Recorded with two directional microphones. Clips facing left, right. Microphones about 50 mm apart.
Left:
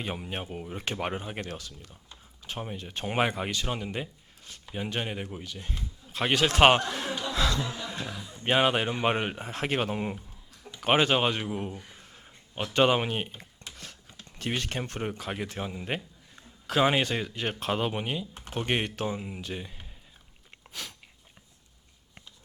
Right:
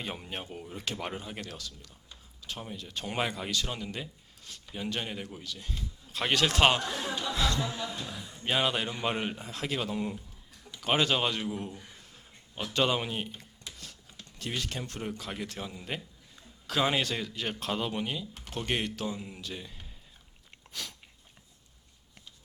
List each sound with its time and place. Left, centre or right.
0.0 s speech: centre
6.1 s speech: centre
6.6 s speech: left
8.4 s speech: left
10.8 s a sound: left
12.7 s speech: left
14.3 s speech: left